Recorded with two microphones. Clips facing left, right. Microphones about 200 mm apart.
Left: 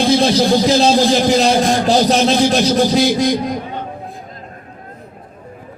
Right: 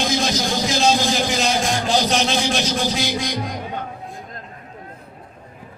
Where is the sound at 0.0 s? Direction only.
35° left (ahead or behind).